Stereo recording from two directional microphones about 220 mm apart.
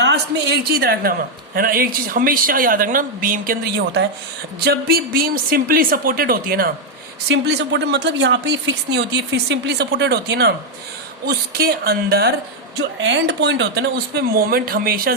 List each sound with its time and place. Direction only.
0.0 s speech: 50° right (ahead or behind)
7.3 s speech: 55° right (ahead or behind)